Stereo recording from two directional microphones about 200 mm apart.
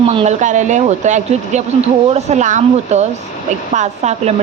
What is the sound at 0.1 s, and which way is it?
Speech, 30° right (ahead or behind).